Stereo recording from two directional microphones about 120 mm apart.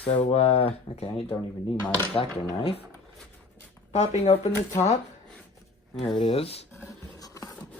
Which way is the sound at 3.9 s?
70° left (ahead or behind).